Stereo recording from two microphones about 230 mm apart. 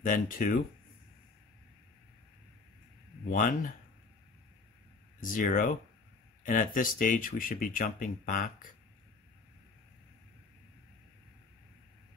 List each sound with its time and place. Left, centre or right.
0.0 s speech: left
3.3 s speech: left
5.2 s speech: left